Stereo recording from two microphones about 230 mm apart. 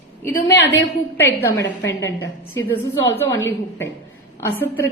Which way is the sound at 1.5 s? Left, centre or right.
Left.